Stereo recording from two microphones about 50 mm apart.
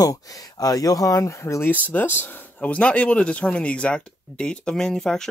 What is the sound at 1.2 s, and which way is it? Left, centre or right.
Speech, left.